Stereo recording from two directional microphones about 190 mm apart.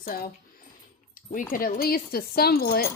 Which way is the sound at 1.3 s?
50° left (ahead or behind).